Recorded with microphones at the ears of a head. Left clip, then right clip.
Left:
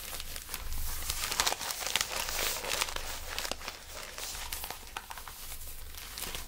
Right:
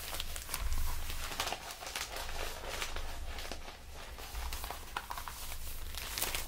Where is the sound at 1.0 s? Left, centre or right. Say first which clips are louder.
Left 7 dB; left.